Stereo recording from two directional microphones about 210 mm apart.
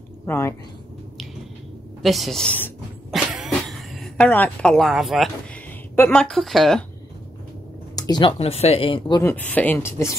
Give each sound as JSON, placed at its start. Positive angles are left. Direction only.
{"t": 0.3, "sound": "speech", "side_deg": 10}
{"t": 2.0, "sound": "speech", "side_deg": 0}
{"t": 3.2, "sound": "a sound", "side_deg": 0}
{"t": 5.9, "sound": "speech", "side_deg": 5}
{"t": 7.9, "sound": "speech", "side_deg": 20}
{"t": 9.2, "sound": "speech", "side_deg": 10}